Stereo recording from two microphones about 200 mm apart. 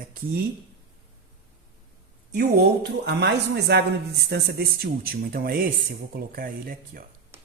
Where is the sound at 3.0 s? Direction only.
55° right (ahead or behind).